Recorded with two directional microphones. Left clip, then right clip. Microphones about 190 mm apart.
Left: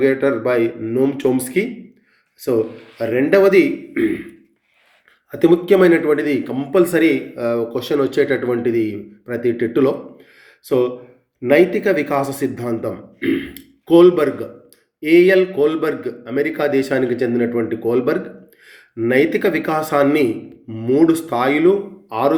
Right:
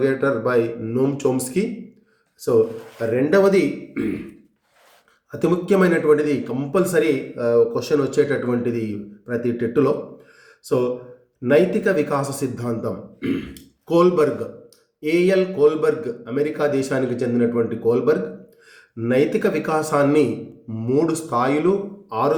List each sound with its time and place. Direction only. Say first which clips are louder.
0.0 s a man's voice: left 3 dB; 10° left (ahead or behind)
3.1 s a man's voice: left 3 dB; 15° left (ahead or behind)
5.3 s a man's voice: left 6 dB; 15° left (ahead or behind)
11.4 s a man's voice: left 3 dB; 20° left (ahead or behind)